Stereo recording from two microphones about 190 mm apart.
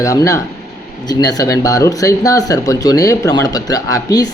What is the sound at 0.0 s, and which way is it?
Speech, 15° left (ahead or behind).